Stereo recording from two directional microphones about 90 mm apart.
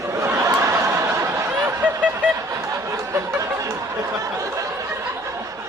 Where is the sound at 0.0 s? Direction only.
35° right (ahead or behind).